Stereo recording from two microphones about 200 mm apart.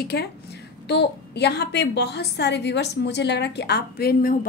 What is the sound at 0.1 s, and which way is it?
A woman's voice, 55° left (ahead or behind).